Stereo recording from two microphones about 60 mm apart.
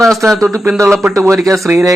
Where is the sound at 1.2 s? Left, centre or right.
Right.